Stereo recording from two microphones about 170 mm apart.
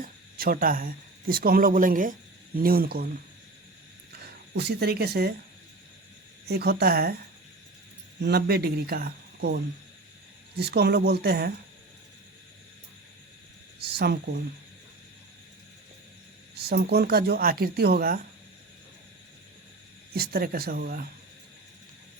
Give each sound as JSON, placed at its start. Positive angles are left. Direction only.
{"t": 0.0, "sound": "speech", "side_deg": -60}
{"t": 4.5, "sound": "speech", "side_deg": -75}
{"t": 6.5, "sound": "speech", "side_deg": -75}
{"t": 8.2, "sound": "speech", "side_deg": -70}
{"t": 10.6, "sound": "speech", "side_deg": -75}
{"t": 13.8, "sound": "speech", "side_deg": -70}
{"t": 16.6, "sound": "speech", "side_deg": -70}
{"t": 20.1, "sound": "speech", "side_deg": -60}